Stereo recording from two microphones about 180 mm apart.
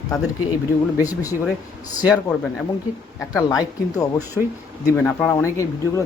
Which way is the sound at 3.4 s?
20° left (ahead or behind).